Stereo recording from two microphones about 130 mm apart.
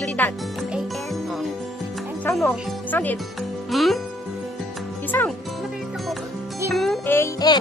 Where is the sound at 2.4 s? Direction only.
15° left (ahead or behind).